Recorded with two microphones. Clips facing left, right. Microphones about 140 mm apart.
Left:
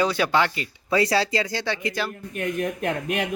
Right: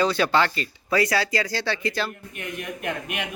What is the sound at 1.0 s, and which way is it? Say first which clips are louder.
Speech: left 2 dB; 30° left (ahead or behind).